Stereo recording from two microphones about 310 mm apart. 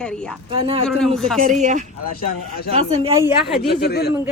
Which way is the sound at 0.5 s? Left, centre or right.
Centre.